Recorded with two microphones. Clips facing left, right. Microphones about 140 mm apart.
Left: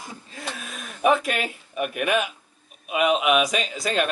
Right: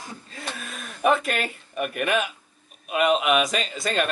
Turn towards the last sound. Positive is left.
turn(degrees=0)  # may be behind; listen again after turning